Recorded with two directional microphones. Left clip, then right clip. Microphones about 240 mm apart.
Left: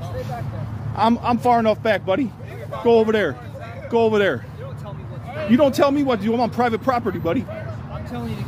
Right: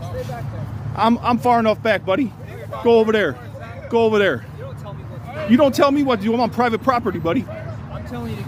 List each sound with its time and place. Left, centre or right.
0.9 s a man's voice: centre
5.5 s a man's voice: centre